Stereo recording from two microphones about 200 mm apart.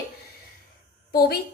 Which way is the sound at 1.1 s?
50° left (ahead or behind).